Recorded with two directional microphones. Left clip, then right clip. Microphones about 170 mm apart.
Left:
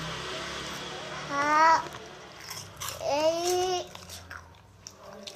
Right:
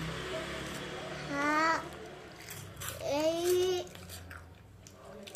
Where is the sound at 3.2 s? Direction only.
30° right (ahead or behind).